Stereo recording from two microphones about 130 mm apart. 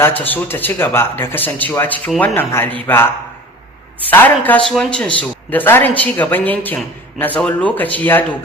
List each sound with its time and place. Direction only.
0.0 s speech: 15° left (ahead or behind)
4.1 s speech: 15° left (ahead or behind)
4.6 s speech: 5° left (ahead or behind)